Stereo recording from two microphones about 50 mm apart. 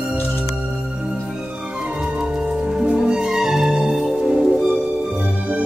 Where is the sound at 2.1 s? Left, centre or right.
Centre.